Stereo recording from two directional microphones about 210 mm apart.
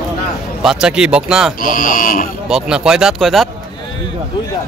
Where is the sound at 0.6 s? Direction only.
Centre (ahead or behind).